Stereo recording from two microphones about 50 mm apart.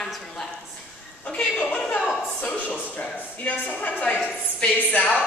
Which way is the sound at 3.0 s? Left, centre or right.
Left.